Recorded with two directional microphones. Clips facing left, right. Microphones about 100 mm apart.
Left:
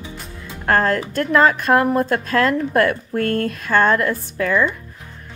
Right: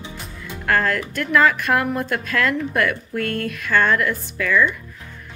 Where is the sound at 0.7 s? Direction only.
35° left (ahead or behind).